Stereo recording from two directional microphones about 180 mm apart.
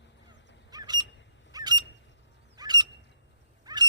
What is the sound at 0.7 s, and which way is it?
Bird, 20° right (ahead or behind).